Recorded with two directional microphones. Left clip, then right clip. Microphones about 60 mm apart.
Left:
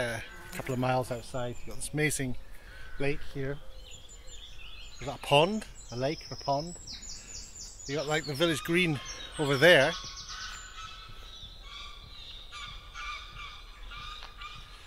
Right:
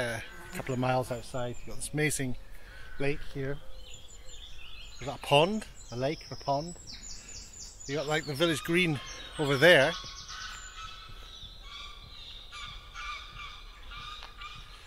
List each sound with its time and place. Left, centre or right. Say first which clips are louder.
0.0 s a sound: even; centre
0.6 s speech: even; centre
1.0 s speech: even; centre
5.0 s speech: even; centre
5.5 s speech: even; centre
12.5 s a sound: even; centre